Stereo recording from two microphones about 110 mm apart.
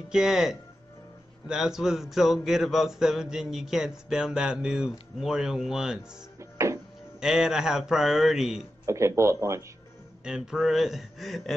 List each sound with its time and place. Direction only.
0.1 s speech: 5° right (ahead or behind)
7.2 s speech: 5° right (ahead or behind)
8.8 s speech: 25° right (ahead or behind)
10.2 s speech: 5° right (ahead or behind)